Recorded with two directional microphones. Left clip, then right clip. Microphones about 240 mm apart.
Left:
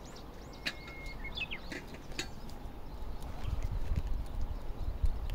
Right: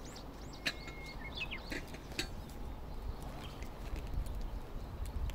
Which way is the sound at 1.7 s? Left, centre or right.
Right.